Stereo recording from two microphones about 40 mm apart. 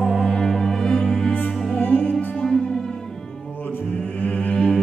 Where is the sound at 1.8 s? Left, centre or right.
Left.